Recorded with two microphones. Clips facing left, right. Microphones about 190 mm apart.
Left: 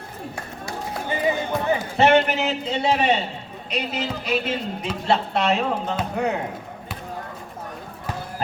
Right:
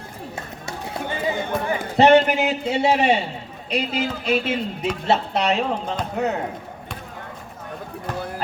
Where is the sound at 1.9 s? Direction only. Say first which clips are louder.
Right 4 dB; 35° right (ahead or behind).